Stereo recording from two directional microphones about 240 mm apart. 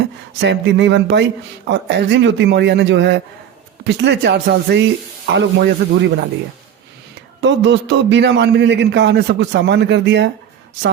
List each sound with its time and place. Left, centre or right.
0.3 s a man's voice: right
7.4 s a man's voice: right